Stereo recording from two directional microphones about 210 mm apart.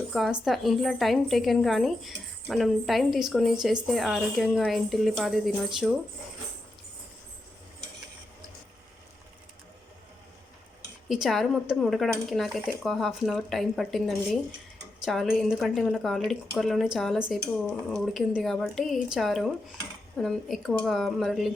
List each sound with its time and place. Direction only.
0.1 s a woman's voice: centre (ahead or behind)
11.1 s a woman's voice: centre (ahead or behind)
15.0 s a woman's voice: centre (ahead or behind)